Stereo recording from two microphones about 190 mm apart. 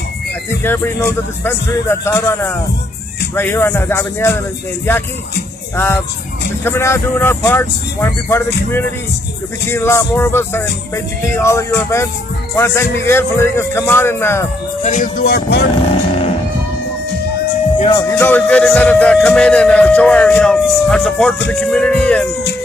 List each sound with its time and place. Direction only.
0.7 s speech: 15° left (ahead or behind)
5.8 s speech: 15° left (ahead or behind)
14.8 s speech: 40° left (ahead or behind); by 15.7 s 60° left (ahead or behind)
15.9 s music: 30° left (ahead or behind)
17.7 s speech: 30° left (ahead or behind)
18.1 s speech: 10° left (ahead or behind)